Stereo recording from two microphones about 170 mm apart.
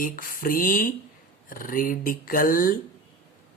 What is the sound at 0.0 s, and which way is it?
Speech, 55° left (ahead or behind).